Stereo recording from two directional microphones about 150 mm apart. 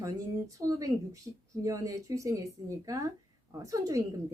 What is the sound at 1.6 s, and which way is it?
A woman's voice, 20° right (ahead or behind).